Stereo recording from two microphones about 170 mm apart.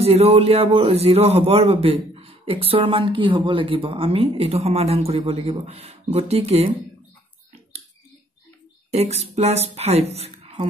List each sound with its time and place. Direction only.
0.0 s a man's voice: 35° right (ahead or behind)
8.9 s speech: 40° right (ahead or behind)